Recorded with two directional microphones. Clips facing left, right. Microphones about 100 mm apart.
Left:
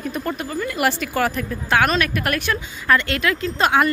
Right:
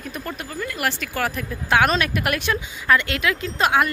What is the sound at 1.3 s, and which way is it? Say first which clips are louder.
A woman's voice: even; 10° right (ahead or behind).